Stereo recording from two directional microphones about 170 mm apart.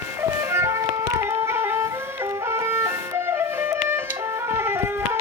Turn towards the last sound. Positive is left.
turn(degrees=-15)  # may be behind; listen again after turning